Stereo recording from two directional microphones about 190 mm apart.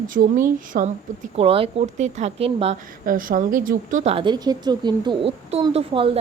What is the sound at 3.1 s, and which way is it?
Speech, 45° right (ahead or behind).